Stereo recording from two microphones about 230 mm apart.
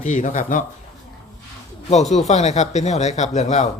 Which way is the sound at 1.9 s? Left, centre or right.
Left.